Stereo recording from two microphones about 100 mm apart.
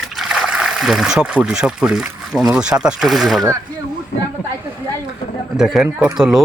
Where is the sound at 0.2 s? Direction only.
5° right (ahead or behind).